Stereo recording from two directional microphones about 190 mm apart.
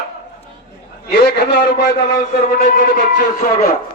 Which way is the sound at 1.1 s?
60° left (ahead or behind).